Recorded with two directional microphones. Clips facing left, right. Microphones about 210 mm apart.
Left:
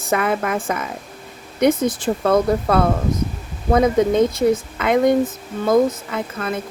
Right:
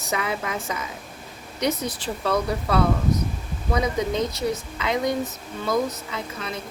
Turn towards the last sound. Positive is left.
turn(degrees=50)  # may be behind; listen again after turning